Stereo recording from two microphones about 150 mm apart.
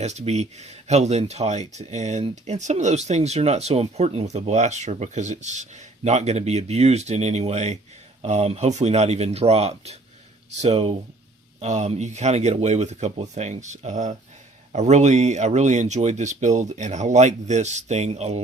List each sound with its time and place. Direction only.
0.0 s speech: 50° right (ahead or behind)